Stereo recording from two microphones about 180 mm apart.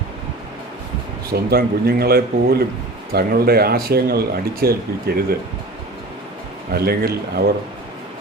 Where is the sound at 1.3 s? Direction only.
60° right (ahead or behind).